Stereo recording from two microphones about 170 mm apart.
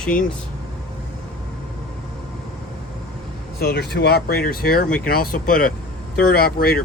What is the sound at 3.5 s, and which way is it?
Speech, 70° left (ahead or behind).